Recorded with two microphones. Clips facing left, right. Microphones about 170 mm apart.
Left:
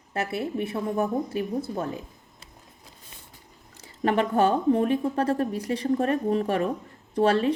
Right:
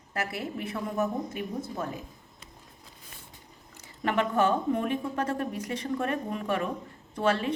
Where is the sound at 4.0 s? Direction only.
35° left (ahead or behind).